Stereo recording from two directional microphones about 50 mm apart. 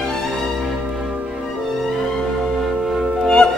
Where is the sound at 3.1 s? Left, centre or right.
Centre.